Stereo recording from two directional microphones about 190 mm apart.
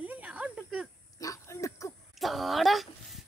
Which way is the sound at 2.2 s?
Centre (ahead or behind).